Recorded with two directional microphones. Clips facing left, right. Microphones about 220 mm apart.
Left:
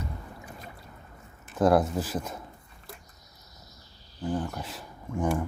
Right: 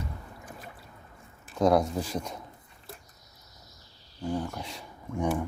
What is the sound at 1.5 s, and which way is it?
Speech, 5° left (ahead or behind).